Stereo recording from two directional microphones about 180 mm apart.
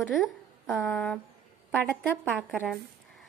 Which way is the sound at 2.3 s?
Centre (ahead or behind).